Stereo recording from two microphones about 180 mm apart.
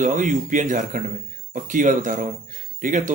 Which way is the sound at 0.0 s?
45° right (ahead or behind).